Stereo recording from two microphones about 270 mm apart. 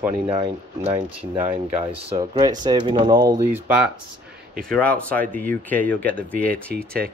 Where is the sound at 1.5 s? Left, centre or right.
Right.